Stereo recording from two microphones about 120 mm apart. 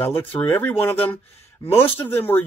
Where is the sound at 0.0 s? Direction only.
20° left (ahead or behind).